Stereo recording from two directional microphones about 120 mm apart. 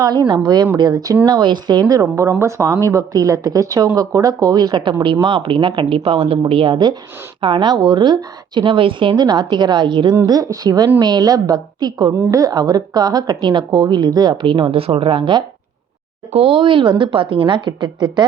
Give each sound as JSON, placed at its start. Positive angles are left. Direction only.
{"t": 0.0, "sound": "a woman's voice", "side_deg": -35}